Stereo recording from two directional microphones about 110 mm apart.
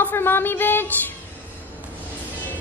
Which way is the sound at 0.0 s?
20° left (ahead or behind).